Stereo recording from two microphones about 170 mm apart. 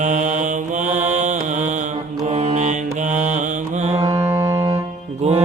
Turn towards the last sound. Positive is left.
turn(degrees=-35)  # may be behind; listen again after turning